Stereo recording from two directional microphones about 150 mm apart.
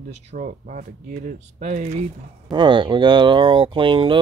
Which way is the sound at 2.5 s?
30° right (ahead or behind).